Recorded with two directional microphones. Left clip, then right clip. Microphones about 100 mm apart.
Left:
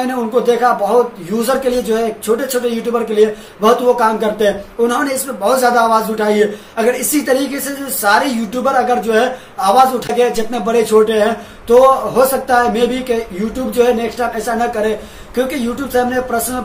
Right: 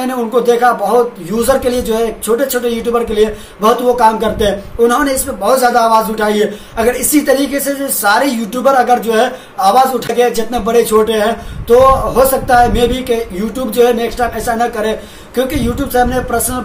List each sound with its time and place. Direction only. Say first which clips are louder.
0.3 s a man's voice: right 3 dB; 20° right (ahead or behind)